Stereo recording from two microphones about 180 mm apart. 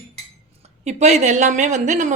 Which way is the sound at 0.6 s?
35° right (ahead or behind).